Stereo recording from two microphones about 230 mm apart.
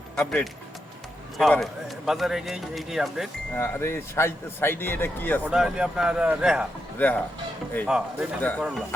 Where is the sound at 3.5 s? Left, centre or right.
Centre.